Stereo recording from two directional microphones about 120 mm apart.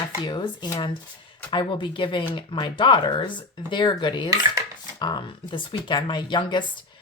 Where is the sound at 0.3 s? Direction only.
40° left (ahead or behind).